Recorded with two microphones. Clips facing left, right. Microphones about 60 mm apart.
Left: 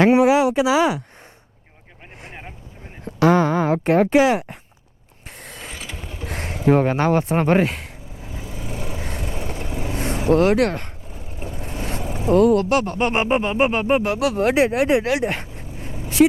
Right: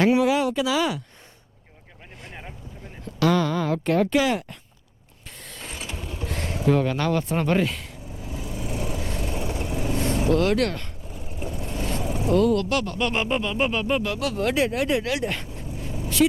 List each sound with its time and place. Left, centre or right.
0.0 s speech: left
2.2 s vehicle: left
3.0 s speech: left
5.5 s mechanisms: left
5.9 s vehicle: left
11.3 s speech: left